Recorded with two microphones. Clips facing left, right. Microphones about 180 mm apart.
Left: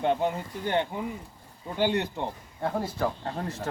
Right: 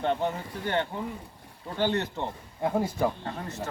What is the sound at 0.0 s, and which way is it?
Speech, 15° left (ahead or behind).